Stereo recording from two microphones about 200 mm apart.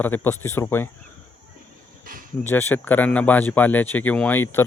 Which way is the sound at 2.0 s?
45° right (ahead or behind).